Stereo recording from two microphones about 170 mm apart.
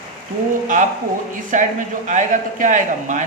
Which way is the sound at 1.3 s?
50° right (ahead or behind).